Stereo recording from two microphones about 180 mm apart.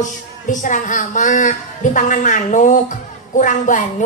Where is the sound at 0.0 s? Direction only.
45° left (ahead or behind).